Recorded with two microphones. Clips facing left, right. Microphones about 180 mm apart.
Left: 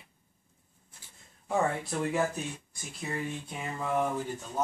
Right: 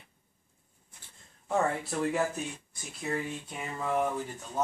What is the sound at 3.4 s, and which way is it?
Speech, centre (ahead or behind).